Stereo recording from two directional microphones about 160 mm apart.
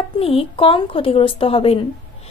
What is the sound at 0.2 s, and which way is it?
A woman's voice, 35° left (ahead or behind).